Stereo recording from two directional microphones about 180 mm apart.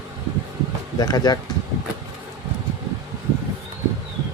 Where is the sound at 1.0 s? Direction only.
20° left (ahead or behind).